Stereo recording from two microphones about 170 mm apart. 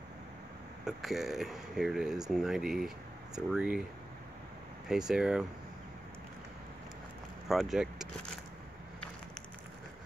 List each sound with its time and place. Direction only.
0.8 s speech: centre (ahead or behind)
4.8 s speech: 5° right (ahead or behind)
7.4 s speech: centre (ahead or behind)